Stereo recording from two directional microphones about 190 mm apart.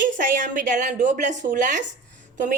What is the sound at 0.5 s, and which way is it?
A woman's voice, 40° right (ahead or behind).